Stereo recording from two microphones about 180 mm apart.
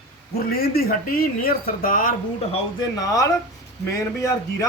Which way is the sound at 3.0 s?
20° left (ahead or behind).